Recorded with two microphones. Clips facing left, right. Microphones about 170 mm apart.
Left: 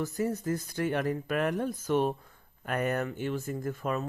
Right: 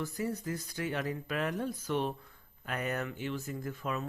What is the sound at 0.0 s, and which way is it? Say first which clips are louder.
Speech: left 5 dB; 45° left (ahead or behind).